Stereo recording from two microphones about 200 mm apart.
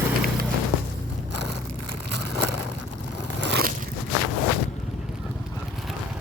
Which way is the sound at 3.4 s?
55° right (ahead or behind).